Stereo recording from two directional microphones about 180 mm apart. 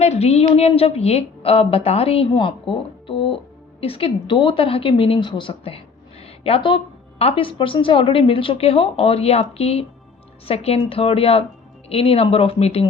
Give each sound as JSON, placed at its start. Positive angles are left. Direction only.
{"t": 0.0, "sound": "a woman's voice", "side_deg": 35}